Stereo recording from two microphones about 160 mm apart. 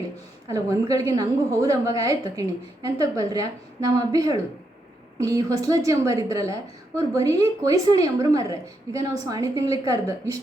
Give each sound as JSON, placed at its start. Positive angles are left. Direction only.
{"t": 0.4, "sound": "a woman's voice", "side_deg": -20}